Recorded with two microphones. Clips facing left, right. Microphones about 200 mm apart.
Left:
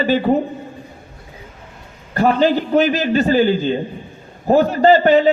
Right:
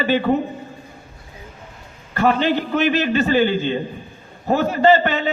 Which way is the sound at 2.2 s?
45° left (ahead or behind).